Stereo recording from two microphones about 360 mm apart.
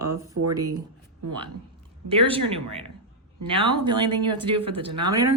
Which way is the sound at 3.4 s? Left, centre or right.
Centre.